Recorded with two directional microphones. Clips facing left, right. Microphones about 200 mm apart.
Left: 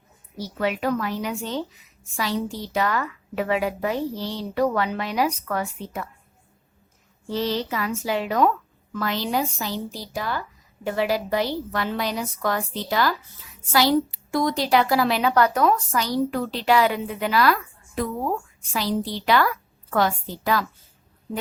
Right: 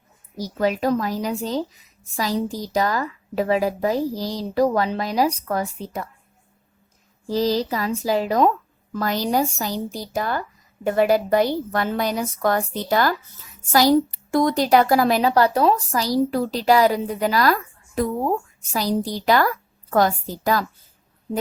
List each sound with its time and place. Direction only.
0.3 s a woman's voice: 40° right (ahead or behind)
7.3 s a woman's voice: 35° right (ahead or behind)